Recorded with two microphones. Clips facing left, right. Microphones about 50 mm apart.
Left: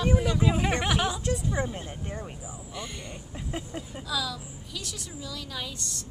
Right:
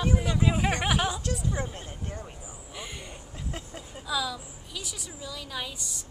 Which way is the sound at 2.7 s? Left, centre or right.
Centre.